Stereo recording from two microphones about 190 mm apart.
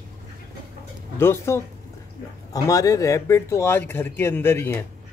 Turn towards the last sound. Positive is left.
turn(degrees=10)  # may be behind; listen again after turning